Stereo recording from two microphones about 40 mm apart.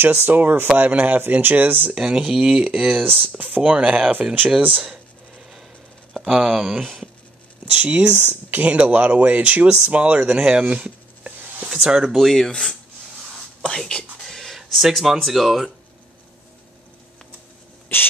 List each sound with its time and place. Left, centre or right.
0.0 s speech: right
2.0 s speech: centre
2.9 s speech: right
3.6 s speech: right
4.6 s speech: right
6.1 s speech: centre
7.7 s speech: right
10.6 s a sound: right
11.8 s speech: centre
12.2 s speech: centre; by 14.0 s left
14.2 s a sound: centre
14.7 s speech: centre